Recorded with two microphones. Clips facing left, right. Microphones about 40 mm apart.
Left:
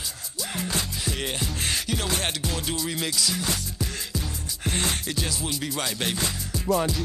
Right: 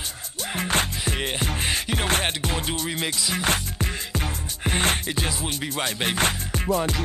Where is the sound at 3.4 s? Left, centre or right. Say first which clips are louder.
Right 5 dB; right.